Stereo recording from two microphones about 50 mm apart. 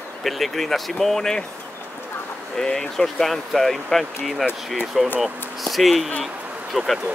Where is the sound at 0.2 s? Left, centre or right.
Centre.